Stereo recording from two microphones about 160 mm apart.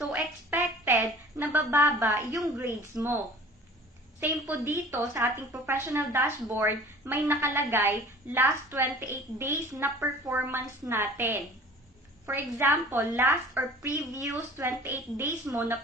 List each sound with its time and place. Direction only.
0.0 s a sound: 5° right (ahead or behind)
1.4 s a woman's voice: 15° right (ahead or behind)
4.2 s a woman's voice: 15° right (ahead or behind)